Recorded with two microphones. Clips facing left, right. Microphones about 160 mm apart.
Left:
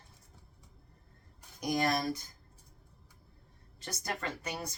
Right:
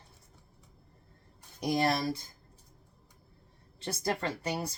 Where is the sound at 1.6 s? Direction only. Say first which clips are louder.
Right 2 dB; 25° right (ahead or behind).